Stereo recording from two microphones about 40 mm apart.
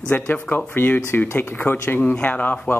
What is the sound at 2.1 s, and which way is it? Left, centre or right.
Speech, left.